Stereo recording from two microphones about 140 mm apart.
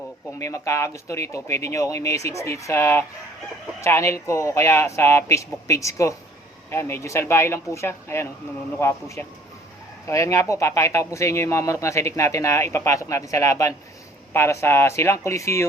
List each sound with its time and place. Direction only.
0.3 s speech: 20° left (ahead or behind)